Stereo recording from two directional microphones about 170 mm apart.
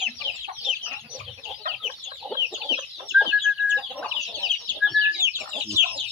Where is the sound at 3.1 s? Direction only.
5° right (ahead or behind).